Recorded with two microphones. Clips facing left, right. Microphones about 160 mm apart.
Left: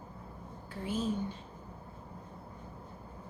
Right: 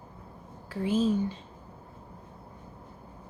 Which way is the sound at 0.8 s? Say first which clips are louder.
Right 8 dB; 90° right.